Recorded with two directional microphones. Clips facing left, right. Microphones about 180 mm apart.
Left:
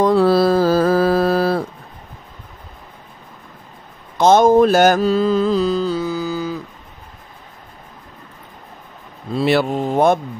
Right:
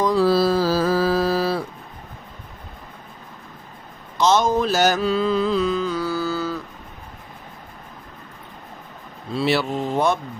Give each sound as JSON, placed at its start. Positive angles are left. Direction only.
{"t": 0.0, "sound": "mantra", "side_deg": 60}
{"t": 4.2, "sound": "mantra", "side_deg": 55}
{"t": 5.9, "sound": "mantra", "side_deg": 15}
{"t": 9.3, "sound": "mantra", "side_deg": 50}